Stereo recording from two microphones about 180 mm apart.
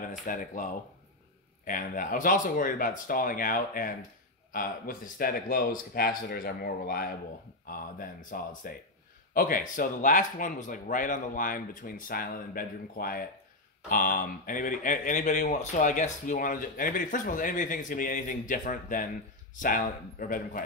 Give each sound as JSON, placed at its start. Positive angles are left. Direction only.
{"t": 0.2, "sound": "speech", "side_deg": 45}